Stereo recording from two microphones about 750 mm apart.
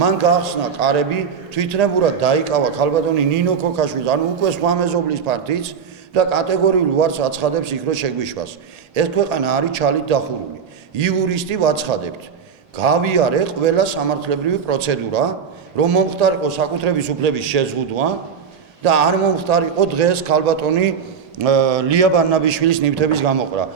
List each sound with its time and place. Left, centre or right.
0.0 s a man's voice: right
21.4 s a man's voice: right